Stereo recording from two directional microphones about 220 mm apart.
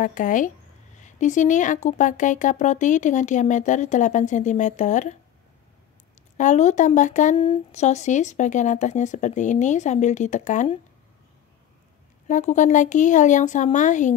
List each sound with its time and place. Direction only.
0.0 s speech: 35° left (ahead or behind)
6.3 s speech: 35° left (ahead or behind)
12.3 s speech: 35° left (ahead or behind)